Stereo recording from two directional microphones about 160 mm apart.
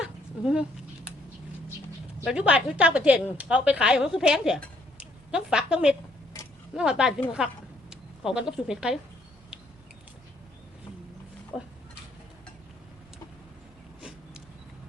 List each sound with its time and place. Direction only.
0.0 s dog: 5° right (ahead or behind)
2.2 s a woman's voice: 5° right (ahead or behind)